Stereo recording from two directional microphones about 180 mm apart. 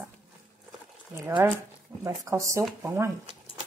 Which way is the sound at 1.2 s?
15° right (ahead or behind).